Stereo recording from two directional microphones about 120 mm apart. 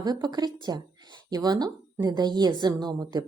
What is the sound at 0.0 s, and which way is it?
Speech, 35° right (ahead or behind).